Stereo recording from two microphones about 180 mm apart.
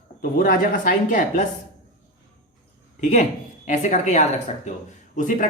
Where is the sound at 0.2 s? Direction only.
55° left (ahead or behind).